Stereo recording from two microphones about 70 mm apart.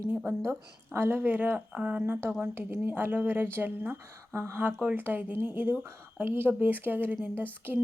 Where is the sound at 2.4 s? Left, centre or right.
Right.